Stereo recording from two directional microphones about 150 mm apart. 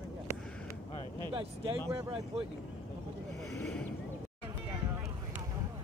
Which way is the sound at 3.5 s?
10° left (ahead or behind).